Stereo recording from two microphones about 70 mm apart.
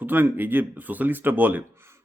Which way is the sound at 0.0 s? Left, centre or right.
Right.